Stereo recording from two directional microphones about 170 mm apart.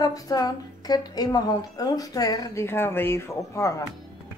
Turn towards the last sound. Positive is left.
turn(degrees=15)  # may be behind; listen again after turning